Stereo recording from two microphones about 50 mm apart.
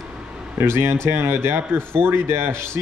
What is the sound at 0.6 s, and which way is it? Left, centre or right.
A man's voice, right.